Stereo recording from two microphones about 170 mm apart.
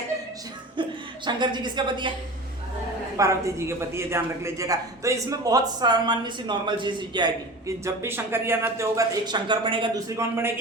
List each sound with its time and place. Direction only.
0.8 s a woman's voice: 25° right (ahead or behind)
3.2 s a man's voice: 20° right (ahead or behind)
7.9 s a man's voice: 15° right (ahead or behind)
10.2 s a man's voice: 15° right (ahead or behind)